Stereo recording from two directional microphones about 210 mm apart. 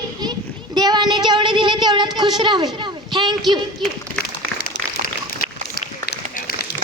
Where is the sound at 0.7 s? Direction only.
20° right (ahead or behind).